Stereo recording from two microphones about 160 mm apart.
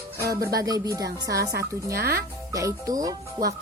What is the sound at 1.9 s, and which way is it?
Speech, 70° right (ahead or behind).